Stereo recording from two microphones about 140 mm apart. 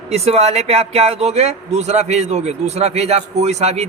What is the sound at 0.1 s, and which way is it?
Speech, 50° right (ahead or behind).